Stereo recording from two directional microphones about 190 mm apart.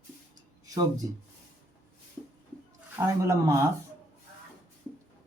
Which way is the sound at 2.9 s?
15° right (ahead or behind).